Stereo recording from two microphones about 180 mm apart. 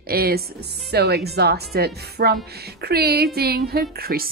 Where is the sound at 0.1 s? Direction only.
60° right (ahead or behind).